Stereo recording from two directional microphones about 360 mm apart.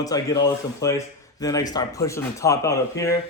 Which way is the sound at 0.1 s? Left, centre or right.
Centre.